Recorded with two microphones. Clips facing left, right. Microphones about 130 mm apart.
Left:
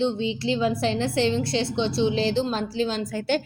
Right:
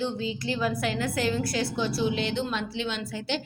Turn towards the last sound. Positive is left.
turn(degrees=50)  # may be behind; listen again after turning